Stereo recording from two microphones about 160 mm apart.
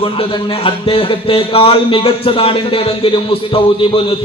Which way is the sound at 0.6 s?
35° left (ahead or behind).